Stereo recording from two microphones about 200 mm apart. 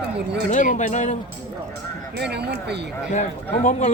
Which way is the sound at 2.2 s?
55° right (ahead or behind).